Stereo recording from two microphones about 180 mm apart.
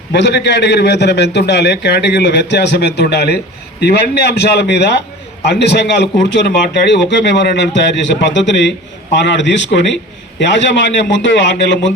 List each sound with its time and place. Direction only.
0.1 s a man's voice: 75° left (ahead or behind)
6.8 s a man's voice: 80° left